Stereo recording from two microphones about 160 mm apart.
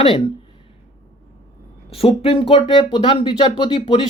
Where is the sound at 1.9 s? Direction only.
35° left (ahead or behind).